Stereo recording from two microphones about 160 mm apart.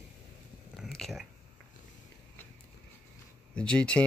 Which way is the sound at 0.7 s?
Centre (ahead or behind).